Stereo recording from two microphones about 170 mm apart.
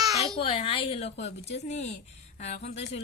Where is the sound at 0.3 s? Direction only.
35° left (ahead or behind).